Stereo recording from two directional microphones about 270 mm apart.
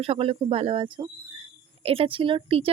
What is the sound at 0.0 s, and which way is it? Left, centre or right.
A woman's voice, right.